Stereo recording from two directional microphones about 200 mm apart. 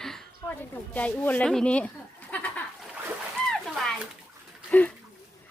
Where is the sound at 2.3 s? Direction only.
5° left (ahead or behind).